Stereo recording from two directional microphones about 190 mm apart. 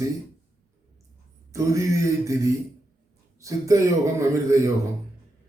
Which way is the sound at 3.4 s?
15° right (ahead or behind).